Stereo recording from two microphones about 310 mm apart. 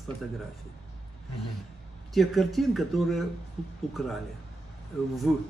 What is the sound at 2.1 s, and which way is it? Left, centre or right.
Speech, centre.